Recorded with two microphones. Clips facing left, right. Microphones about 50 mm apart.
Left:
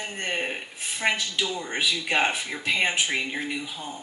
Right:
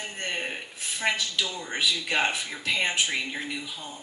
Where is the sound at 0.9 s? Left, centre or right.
Left.